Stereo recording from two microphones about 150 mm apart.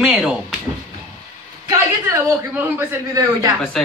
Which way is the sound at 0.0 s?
5° right (ahead or behind).